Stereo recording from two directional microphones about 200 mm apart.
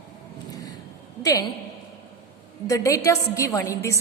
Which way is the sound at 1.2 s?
15° left (ahead or behind).